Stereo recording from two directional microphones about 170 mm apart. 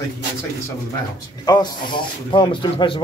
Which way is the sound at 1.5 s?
25° left (ahead or behind).